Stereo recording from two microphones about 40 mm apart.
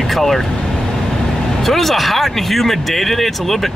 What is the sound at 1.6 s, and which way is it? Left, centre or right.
Speech, centre.